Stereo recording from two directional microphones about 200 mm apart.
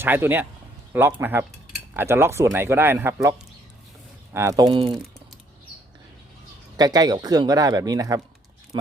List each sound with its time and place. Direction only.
0.0 s speech: 10° right (ahead or behind)
6.7 s speech: 20° right (ahead or behind)